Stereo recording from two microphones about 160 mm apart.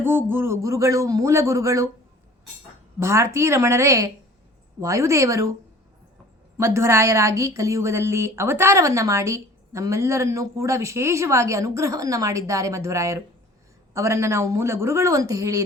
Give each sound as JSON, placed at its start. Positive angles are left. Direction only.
{"t": 0.0, "sound": "a woman's voice", "side_deg": -15}
{"t": 3.0, "sound": "a woman's voice", "side_deg": -15}
{"t": 6.6, "sound": "a woman's voice", "side_deg": -15}